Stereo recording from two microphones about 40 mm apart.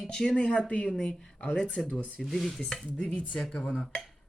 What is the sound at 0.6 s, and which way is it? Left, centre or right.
Cutlery, left.